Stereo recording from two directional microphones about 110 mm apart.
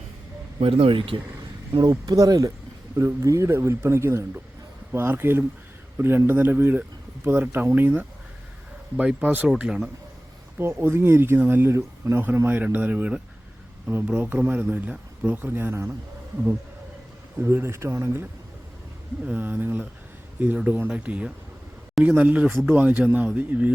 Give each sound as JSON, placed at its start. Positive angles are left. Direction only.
{"t": 0.6, "sound": "speech", "side_deg": -55}
{"t": 1.8, "sound": "speech", "side_deg": -40}
{"t": 10.6, "sound": "speech", "side_deg": -20}
{"t": 17.4, "sound": "speech", "side_deg": -20}